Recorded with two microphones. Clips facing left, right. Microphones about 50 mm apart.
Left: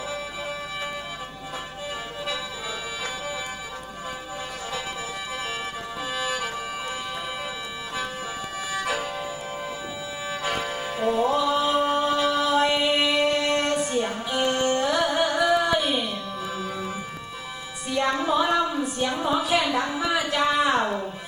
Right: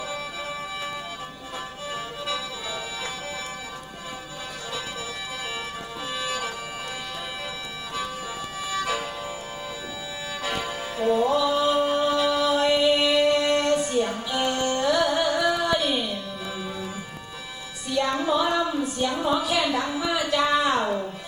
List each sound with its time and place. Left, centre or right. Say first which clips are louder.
6.1 s music: left 1 dB; centre
8.8 s music: even; centre
10.5 s music: left 1 dB; centre
11.1 s mantra: right 1 dB; left
12.1 s music: even; centre
12.5 s music: right 1 dB; left
14.5 s carnatic music: right 1 dB; left
17.8 s music: even; left
18.3 s a sound: left 1 dB; left
20.8 s music: right 1 dB; centre